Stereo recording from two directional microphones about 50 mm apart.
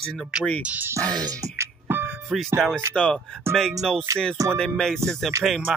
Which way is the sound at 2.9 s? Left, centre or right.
Centre.